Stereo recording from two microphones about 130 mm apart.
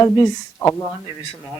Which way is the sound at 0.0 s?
20° left (ahead or behind).